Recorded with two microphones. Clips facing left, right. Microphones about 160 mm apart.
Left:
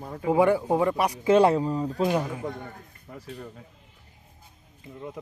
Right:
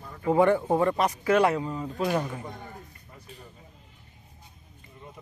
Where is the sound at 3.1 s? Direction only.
70° left (ahead or behind).